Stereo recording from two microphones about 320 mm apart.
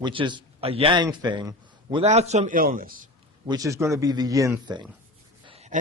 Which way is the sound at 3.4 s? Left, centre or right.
Centre.